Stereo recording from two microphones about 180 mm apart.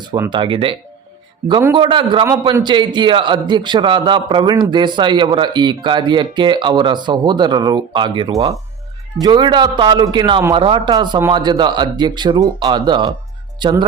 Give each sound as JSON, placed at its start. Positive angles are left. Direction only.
{"t": 0.0, "sound": "a man's voice", "side_deg": -20}